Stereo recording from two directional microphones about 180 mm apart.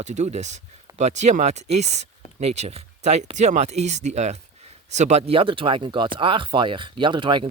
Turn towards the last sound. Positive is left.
turn(degrees=-30)  # may be behind; listen again after turning